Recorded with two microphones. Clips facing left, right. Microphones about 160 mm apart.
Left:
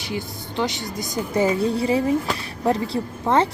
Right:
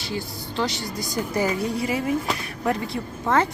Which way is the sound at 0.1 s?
20° left (ahead or behind).